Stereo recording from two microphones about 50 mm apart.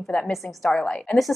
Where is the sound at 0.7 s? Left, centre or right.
Centre.